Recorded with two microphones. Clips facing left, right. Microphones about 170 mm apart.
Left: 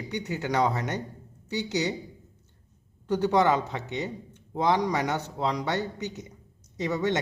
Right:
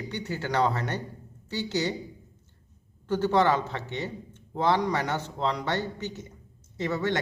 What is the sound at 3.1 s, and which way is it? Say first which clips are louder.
A man's voice: even; 15° left (ahead or behind).